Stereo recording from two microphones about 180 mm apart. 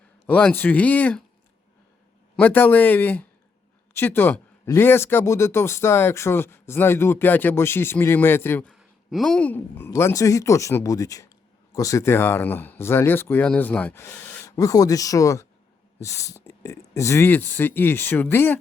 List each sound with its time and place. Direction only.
0.3 s speech: 10° left (ahead or behind)
2.3 s speech: 10° left (ahead or behind)
8.7 s speech: centre (ahead or behind)